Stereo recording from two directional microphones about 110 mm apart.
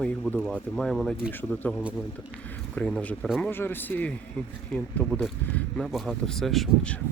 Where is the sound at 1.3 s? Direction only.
15° left (ahead or behind).